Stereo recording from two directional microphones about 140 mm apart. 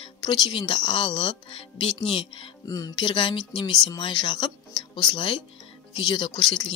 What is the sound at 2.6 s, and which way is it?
Speech, 25° left (ahead or behind).